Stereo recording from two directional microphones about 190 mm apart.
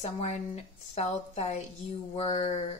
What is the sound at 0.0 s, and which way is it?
Speech, 35° left (ahead or behind).